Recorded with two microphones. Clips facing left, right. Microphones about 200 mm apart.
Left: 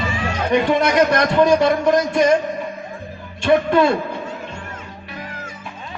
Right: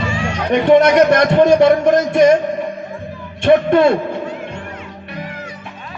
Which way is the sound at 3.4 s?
55° right (ahead or behind).